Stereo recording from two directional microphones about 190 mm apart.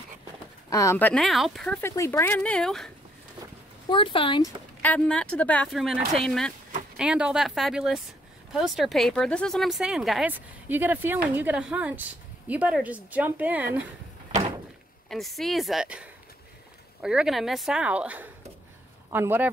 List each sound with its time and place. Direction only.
0.7 s speech: 15° left (ahead or behind)
3.9 s speech: 25° left (ahead or behind)
4.8 s a woman's voice: 5° left (ahead or behind)
15.0 s a woman's voice: centre (ahead or behind)